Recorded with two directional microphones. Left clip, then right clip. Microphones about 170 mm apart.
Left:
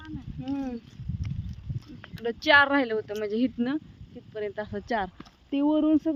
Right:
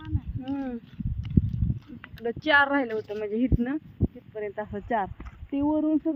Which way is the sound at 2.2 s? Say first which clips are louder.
Left 2 dB; 10° left (ahead or behind).